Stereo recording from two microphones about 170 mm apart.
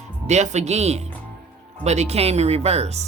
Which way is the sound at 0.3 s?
40° right (ahead or behind).